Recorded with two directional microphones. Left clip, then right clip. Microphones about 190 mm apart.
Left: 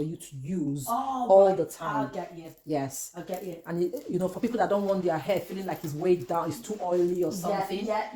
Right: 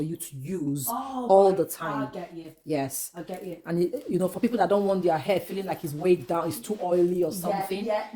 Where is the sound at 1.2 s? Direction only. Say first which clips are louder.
Even; 50° right (ahead or behind).